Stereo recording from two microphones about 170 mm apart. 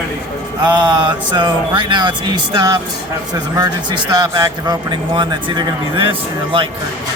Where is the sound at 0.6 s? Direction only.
25° right (ahead or behind).